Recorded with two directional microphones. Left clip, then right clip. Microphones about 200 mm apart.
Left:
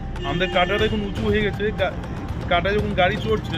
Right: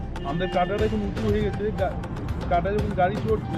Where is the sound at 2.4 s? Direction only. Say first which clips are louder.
Left 4 dB; 15° left (ahead or behind).